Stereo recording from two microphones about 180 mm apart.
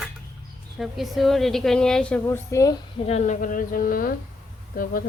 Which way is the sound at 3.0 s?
40° left (ahead or behind).